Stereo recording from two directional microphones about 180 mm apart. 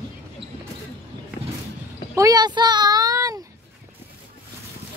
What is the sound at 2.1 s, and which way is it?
Child singing, 20° right (ahead or behind).